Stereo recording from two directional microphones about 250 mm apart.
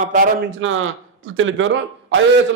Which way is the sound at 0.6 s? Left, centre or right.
Right.